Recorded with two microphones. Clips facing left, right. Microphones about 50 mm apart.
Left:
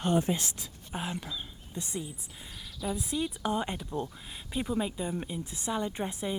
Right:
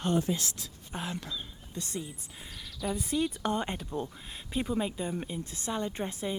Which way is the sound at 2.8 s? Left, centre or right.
Centre.